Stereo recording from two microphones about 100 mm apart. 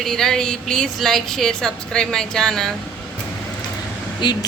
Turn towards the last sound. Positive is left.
turn(degrees=50)  # may be behind; listen again after turning